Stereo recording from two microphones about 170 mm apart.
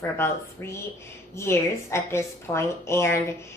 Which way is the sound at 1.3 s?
15° left (ahead or behind).